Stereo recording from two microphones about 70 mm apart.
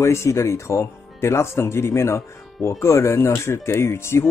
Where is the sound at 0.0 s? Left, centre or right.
Left.